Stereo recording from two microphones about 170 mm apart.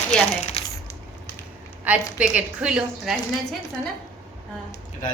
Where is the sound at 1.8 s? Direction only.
10° right (ahead or behind).